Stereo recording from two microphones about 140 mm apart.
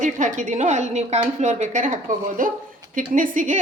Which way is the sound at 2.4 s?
75° right (ahead or behind).